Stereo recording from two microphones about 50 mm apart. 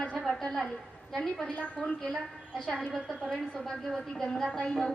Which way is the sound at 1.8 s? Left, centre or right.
Left.